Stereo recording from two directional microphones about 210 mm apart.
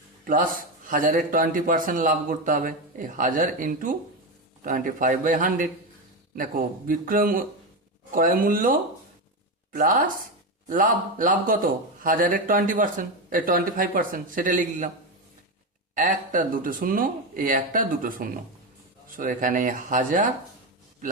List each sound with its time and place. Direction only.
0.3 s a man's voice: 40° right (ahead or behind)
16.0 s a man's voice: 40° right (ahead or behind)